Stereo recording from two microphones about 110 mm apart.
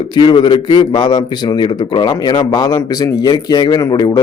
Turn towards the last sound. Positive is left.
turn(degrees=40)  # may be behind; listen again after turning